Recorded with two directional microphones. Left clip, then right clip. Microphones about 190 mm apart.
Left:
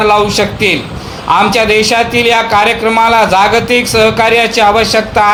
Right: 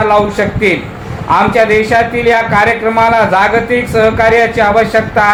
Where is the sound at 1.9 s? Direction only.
40° left (ahead or behind).